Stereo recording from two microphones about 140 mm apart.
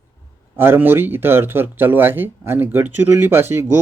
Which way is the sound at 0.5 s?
15° right (ahead or behind).